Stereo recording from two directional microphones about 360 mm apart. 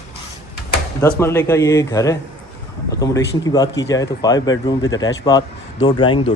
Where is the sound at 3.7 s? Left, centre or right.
Left.